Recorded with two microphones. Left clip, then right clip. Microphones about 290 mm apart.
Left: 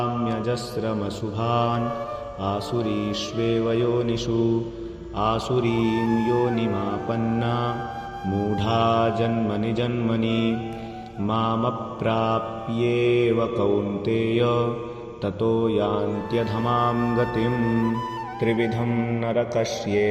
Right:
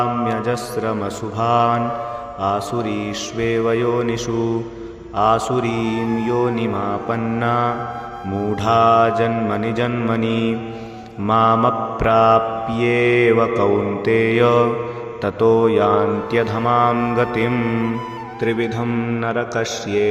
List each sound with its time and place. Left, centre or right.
0.0 s mantra: right
5.9 s music: centre
7.1 s mantra: right
17.6 s music: centre
18.6 s mantra: right